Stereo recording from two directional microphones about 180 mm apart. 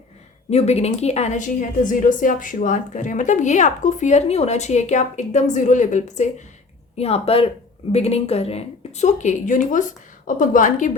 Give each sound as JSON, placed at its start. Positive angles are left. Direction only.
{"t": 0.5, "sound": "a woman's voice", "side_deg": 35}